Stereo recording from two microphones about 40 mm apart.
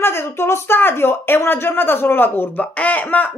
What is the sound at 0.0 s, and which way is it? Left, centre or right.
Speech, left.